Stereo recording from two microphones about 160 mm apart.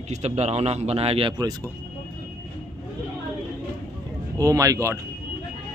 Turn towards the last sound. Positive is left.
turn(degrees=-20)  # may be behind; listen again after turning